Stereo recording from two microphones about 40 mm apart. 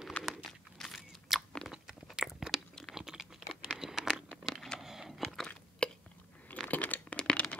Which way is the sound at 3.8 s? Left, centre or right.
Centre.